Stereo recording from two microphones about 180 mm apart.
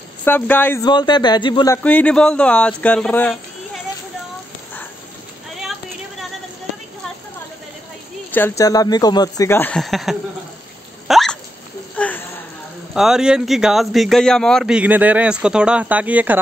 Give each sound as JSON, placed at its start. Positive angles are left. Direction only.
{"t": 0.2, "sound": "speech", "side_deg": 10}
{"t": 0.8, "sound": "speech", "side_deg": 25}
{"t": 1.8, "sound": "speech", "side_deg": 10}
{"t": 8.3, "sound": "speech", "side_deg": 10}
{"t": 11.1, "sound": "hiccup", "side_deg": 0}
{"t": 12.0, "sound": "a sound", "side_deg": 10}
{"t": 12.9, "sound": "a man's voice", "side_deg": -5}